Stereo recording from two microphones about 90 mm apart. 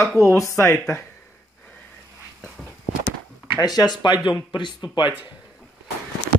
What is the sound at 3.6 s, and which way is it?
Speech, 45° left (ahead or behind).